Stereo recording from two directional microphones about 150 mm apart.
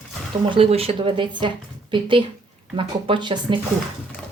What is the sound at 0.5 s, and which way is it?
A woman's voice, 40° right (ahead or behind).